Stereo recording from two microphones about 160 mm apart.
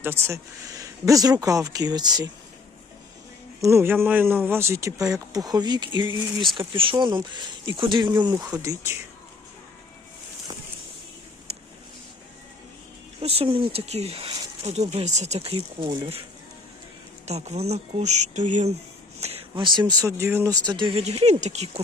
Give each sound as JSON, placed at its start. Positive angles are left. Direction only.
{"t": 0.0, "sound": "speech", "side_deg": -15}
{"t": 3.6, "sound": "speech", "side_deg": -15}
{"t": 8.3, "sound": "speech", "side_deg": -10}
{"t": 13.2, "sound": "speech", "side_deg": -40}
{"t": 17.2, "sound": "speech", "side_deg": -45}